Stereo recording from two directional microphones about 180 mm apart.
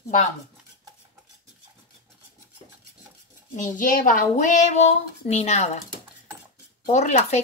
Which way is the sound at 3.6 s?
50° left (ahead or behind).